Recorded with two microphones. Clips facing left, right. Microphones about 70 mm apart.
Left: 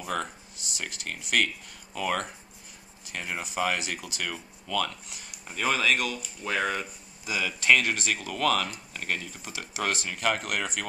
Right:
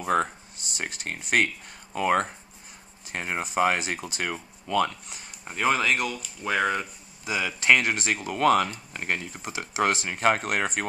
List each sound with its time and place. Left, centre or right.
0.0 s speech: right
5.9 s speech: centre; by 10.9 s right